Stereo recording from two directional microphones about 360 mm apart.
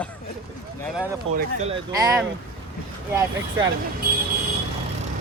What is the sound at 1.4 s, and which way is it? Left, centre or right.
Speech, centre.